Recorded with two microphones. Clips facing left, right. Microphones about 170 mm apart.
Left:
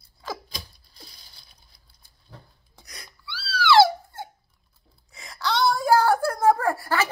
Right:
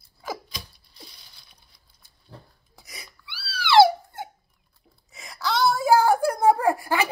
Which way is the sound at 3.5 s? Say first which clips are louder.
Right 1 dB; 20° right (ahead or behind).